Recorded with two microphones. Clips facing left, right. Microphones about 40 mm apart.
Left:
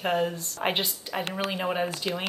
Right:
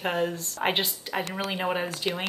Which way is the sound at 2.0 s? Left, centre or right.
Right.